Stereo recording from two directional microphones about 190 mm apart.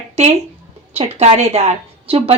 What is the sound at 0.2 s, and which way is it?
Speech, 35° right (ahead or behind).